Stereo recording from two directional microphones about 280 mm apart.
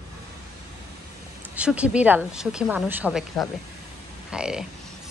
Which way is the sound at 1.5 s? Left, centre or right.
Centre.